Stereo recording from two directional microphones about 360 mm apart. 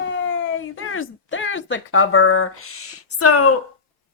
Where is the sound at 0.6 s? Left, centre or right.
Left.